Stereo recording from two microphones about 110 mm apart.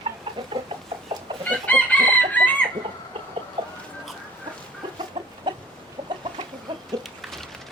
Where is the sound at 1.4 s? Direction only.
15° left (ahead or behind).